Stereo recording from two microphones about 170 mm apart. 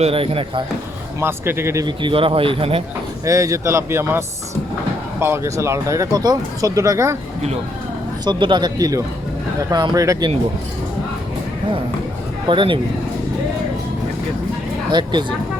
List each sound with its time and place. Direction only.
0.0 s a man's voice: 35° right (ahead or behind)
1.2 s a man's voice: 15° right (ahead or behind)
2.0 s a man's voice: 30° right (ahead or behind)
3.2 s a man's voice: 20° right (ahead or behind)
5.2 s a man's voice: 15° right (ahead or behind)
8.2 s speech: 25° right (ahead or behind)
12.5 s speech: 30° right (ahead or behind)
14.8 s speech: 25° right (ahead or behind)